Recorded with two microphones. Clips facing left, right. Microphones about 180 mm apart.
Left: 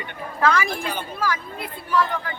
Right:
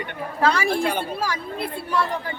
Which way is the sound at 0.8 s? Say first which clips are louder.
Right 6 dB; 70° right (ahead or behind).